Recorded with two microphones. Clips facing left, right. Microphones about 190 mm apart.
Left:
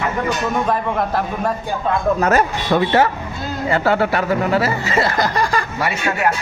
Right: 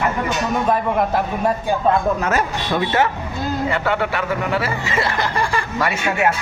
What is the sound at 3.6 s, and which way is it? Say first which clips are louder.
Speech: left 6 dB; 35° left (ahead or behind).